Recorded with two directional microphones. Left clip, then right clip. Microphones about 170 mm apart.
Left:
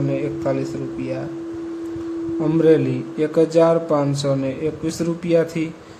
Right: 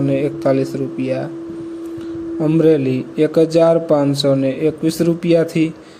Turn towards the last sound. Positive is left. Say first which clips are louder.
# right 4 dB
turn(degrees=-20)  # may be behind; listen again after turning